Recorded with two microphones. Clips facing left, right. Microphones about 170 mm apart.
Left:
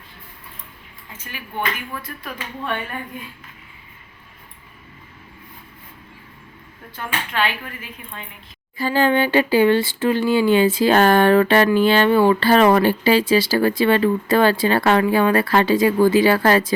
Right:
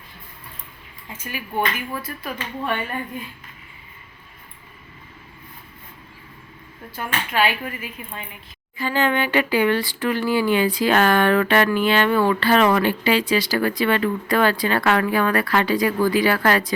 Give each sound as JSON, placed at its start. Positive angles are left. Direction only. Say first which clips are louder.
{"t": 1.1, "sound": "speech", "louder": "right 4 dB", "side_deg": -10}
{"t": 6.9, "sound": "speech", "louder": "right 2 dB", "side_deg": -10}
{"t": 8.8, "sound": "a woman's voice", "louder": "left 4 dB", "side_deg": 35}